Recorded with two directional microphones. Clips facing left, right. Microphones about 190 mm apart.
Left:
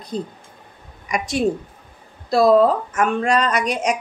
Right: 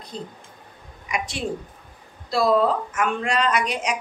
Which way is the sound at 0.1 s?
40° left (ahead or behind).